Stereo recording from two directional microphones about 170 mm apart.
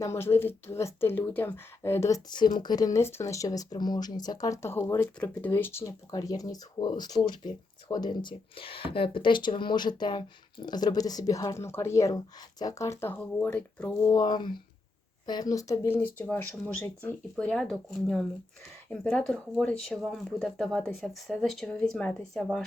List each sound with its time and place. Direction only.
0.0 s speech: 15° left (ahead or behind)
14.1 s speech: 25° left (ahead or behind); by 22.4 s 5° left (ahead or behind)